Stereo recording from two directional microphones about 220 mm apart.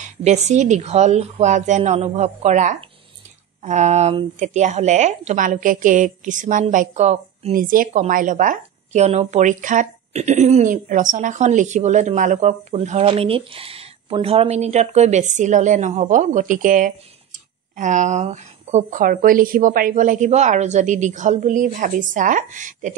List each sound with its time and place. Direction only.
0.0 s a woman's voice: 30° right (ahead or behind)